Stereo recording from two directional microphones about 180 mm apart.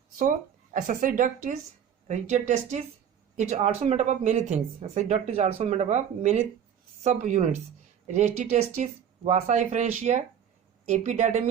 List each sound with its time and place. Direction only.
0.2 s a woman's voice: 50° right (ahead or behind)